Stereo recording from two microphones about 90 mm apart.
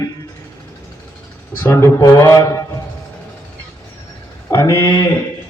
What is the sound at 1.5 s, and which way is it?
A man's voice, 30° left (ahead or behind).